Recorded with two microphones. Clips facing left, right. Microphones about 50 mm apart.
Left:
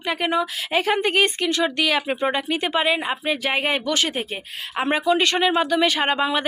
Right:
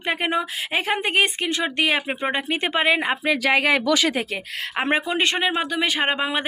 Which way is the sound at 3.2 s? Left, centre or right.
Right.